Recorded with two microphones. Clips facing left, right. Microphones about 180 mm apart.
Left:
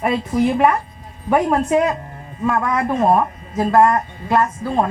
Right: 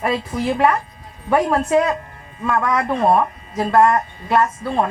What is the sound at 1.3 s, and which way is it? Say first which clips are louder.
A woman's voice: left 1 dB; 15° left (ahead or behind).